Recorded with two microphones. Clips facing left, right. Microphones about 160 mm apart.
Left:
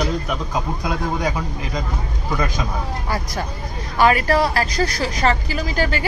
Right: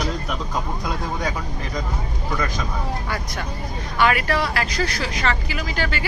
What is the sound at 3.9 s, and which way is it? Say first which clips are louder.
Speech: left 4 dB; 40° left (ahead or behind).